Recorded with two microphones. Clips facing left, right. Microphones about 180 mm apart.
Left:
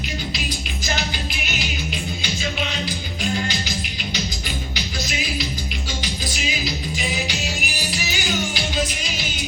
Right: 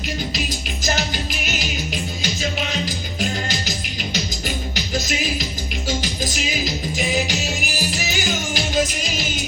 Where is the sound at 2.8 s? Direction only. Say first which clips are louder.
Right 1 dB; 45° right (ahead or behind).